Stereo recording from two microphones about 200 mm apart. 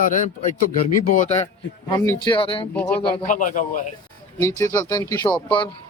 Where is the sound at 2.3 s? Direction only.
25° left (ahead or behind).